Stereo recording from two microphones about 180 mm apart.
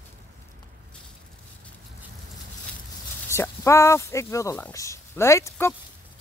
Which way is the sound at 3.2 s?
15° left (ahead or behind).